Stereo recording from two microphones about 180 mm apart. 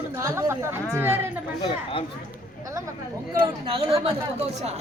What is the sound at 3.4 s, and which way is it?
Speech, 30° right (ahead or behind).